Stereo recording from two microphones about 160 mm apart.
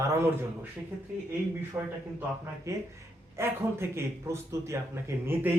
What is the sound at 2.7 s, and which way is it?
Speech, 15° right (ahead or behind).